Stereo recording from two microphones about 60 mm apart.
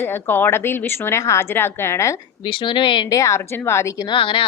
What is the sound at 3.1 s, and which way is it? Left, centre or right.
Speech, left.